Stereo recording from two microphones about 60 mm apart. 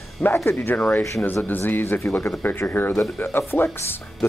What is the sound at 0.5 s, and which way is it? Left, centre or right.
Speech, left.